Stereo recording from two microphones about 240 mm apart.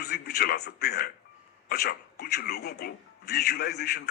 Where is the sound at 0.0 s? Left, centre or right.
Left.